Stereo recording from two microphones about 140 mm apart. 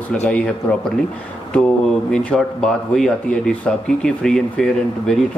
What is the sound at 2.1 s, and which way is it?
Speech, 5° left (ahead or behind).